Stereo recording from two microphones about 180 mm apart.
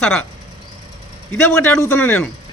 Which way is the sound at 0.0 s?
5° left (ahead or behind).